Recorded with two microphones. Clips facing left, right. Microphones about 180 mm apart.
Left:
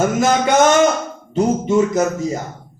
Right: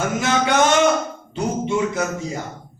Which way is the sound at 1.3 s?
40° left (ahead or behind).